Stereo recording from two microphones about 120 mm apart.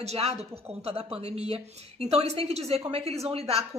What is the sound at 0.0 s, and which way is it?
Speech, 60° right (ahead or behind).